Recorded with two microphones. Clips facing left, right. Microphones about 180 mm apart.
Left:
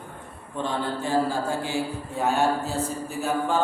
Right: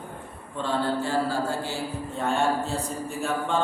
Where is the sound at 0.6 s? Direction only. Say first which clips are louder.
Right 2 dB; 15° left (ahead or behind).